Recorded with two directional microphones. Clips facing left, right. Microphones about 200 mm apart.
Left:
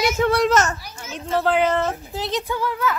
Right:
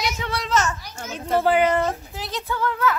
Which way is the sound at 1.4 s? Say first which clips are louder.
Even; 10° right (ahead or behind).